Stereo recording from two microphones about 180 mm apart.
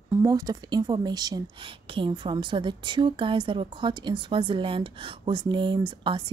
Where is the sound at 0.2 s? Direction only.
20° right (ahead or behind).